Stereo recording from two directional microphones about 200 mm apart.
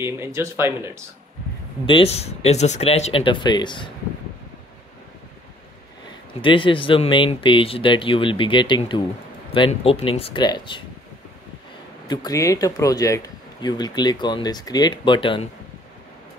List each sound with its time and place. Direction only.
0.0 s speech: 15° right (ahead or behind)
1.9 s speech: 30° left (ahead or behind)
6.4 s speech: 25° left (ahead or behind)
12.1 s speech: 20° left (ahead or behind)